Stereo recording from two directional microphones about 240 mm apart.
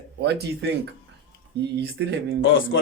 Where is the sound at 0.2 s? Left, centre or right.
Right.